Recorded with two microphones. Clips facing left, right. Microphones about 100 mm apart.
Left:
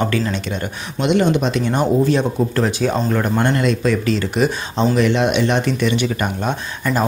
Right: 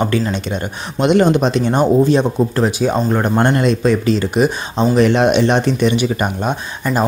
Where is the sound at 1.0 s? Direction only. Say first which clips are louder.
Right 4 dB; 45° right (ahead or behind).